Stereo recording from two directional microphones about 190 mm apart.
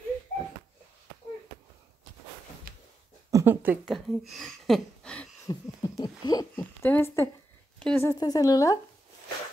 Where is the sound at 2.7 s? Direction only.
50° right (ahead or behind).